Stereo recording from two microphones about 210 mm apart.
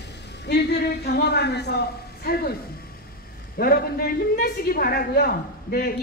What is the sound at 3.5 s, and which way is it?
A woman's voice, 45° left (ahead or behind).